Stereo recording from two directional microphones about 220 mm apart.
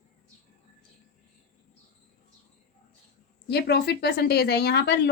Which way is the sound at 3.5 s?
50° left (ahead or behind).